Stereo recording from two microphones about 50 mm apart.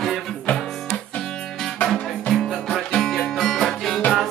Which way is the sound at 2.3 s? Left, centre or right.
Centre.